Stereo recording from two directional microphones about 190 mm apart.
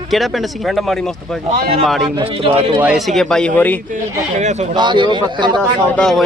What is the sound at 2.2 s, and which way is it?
Speech, 30° right (ahead or behind).